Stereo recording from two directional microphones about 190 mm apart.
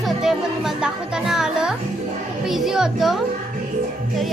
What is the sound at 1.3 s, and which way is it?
Music, 5° right (ahead or behind).